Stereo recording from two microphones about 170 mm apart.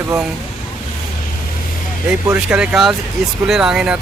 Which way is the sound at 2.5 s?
5° right (ahead or behind).